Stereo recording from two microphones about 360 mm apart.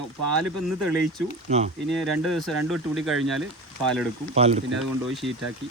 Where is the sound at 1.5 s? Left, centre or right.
Centre.